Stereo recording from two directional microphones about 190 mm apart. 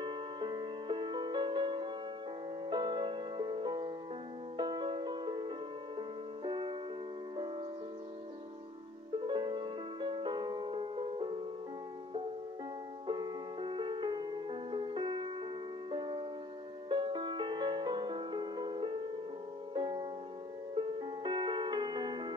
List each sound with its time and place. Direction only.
0.0 s music: 25° right (ahead or behind)
9.2 s music: 25° right (ahead or behind)
13.0 s music: 25° right (ahead or behind)